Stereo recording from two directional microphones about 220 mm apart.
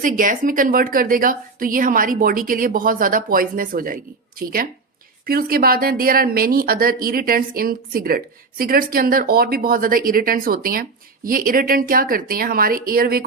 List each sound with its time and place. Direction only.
0.0 s speech: 35° right (ahead or behind)